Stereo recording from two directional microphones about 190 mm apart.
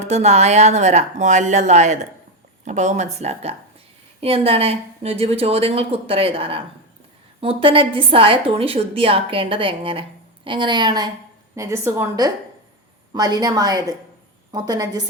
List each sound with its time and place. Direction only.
0.0 s a woman's voice: 35° right (ahead or behind); by 15.0 s 20° right (ahead or behind)